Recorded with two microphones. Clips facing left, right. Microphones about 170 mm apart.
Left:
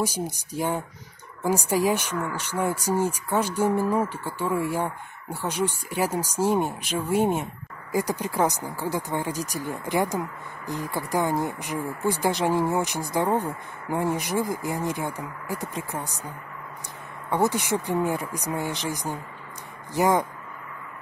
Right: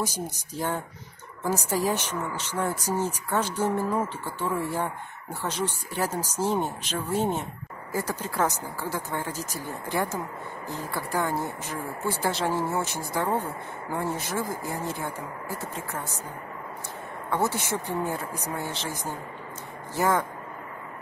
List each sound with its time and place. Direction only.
0.0 s speech: 10° left (ahead or behind)
17.3 s speech: 15° left (ahead or behind)